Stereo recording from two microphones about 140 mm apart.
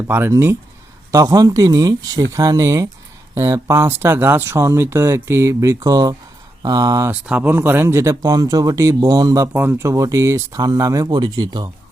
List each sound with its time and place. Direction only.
0.1 s speech: 15° right (ahead or behind)
7.1 s speech: 10° right (ahead or behind); by 11.7 s 30° right (ahead or behind)